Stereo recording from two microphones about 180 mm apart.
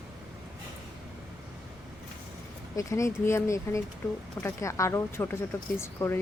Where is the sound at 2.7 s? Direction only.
15° left (ahead or behind).